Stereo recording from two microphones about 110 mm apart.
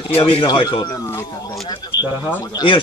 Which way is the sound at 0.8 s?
25° left (ahead or behind).